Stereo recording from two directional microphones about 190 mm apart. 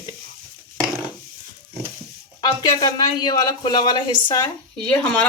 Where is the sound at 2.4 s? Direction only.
20° left (ahead or behind).